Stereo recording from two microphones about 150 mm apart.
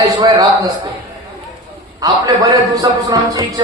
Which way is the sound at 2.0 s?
25° right (ahead or behind).